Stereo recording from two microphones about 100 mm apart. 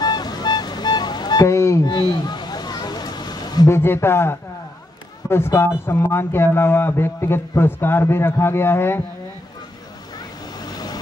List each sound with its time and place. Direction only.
0.0 s music: 45° left (ahead or behind)
2.0 s a sound: 45° left (ahead or behind)
3.6 s a man's voice: 25° left (ahead or behind)
10.1 s vehicle: 40° left (ahead or behind)